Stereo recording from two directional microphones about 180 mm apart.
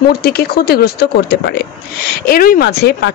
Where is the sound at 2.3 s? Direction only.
55° left (ahead or behind).